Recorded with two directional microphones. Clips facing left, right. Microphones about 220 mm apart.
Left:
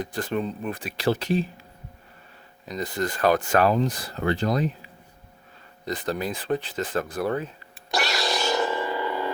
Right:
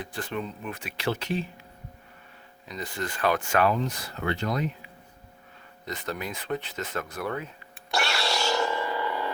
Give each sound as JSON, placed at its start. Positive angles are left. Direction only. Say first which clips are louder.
{"t": 0.0, "sound": "speech", "louder": "left 6 dB", "side_deg": 40}
{"t": 2.6, "sound": "speech", "louder": "left 6 dB", "side_deg": 40}
{"t": 7.9, "sound": "a sound", "louder": "left 2 dB", "side_deg": 20}